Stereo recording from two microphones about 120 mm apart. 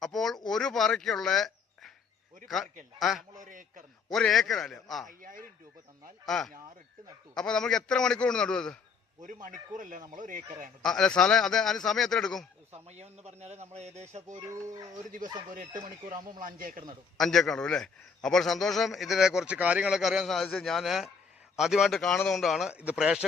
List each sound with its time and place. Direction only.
0.0 s a sound: 5° left (ahead or behind)
0.4 s speech: 5° left (ahead or behind)
3.0 s a man's voice: centre (ahead or behind)
3.3 s speech: 90° right
4.1 s a man's voice: 5° left (ahead or behind)
6.2 s a man's voice: 5° left (ahead or behind)
9.2 s speech: 90° right
10.8 s a man's voice: 5° left (ahead or behind)
12.7 s speech: 65° right (ahead or behind)
14.3 s speech: 30° right (ahead or behind)
17.2 s a man's voice: 5° left (ahead or behind)